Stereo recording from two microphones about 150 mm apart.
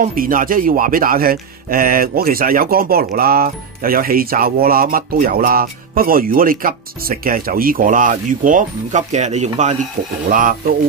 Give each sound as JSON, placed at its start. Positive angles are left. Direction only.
{"t": 0.0, "sound": "speech", "side_deg": -70}